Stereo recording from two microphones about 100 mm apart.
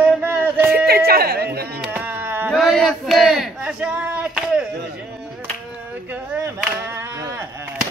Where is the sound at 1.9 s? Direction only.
20° right (ahead or behind).